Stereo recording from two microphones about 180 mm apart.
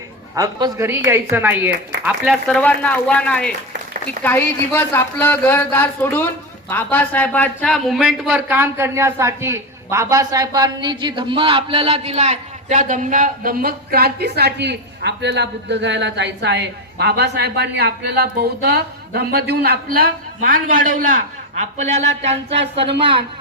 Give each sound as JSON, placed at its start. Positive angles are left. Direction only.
{"t": 0.3, "sound": "a woman's voice", "side_deg": -20}
{"t": 8.4, "sound": "a man's voice", "side_deg": -10}